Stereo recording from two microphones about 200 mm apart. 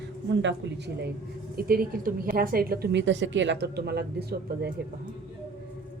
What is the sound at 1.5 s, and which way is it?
A woman's voice, 45° right (ahead or behind).